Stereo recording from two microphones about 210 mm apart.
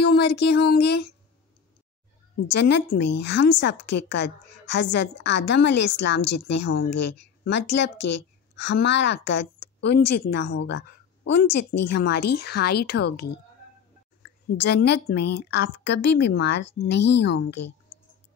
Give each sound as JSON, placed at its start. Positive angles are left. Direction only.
{"t": 0.0, "sound": "speech", "side_deg": 50}
{"t": 2.4, "sound": "a woman's voice", "side_deg": 55}